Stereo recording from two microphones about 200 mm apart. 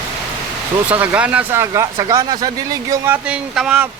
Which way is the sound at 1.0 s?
5° right (ahead or behind).